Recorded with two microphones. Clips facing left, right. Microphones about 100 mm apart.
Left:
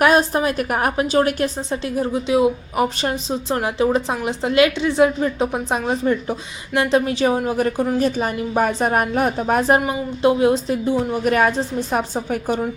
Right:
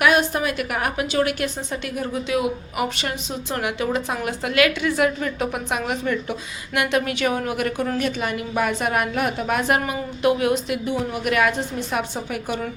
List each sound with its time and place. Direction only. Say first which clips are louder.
0.0 s a woman's voice: left 3 dB; 35° left (ahead or behind)